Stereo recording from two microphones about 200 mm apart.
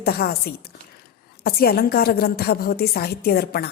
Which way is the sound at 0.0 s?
50° left (ahead or behind).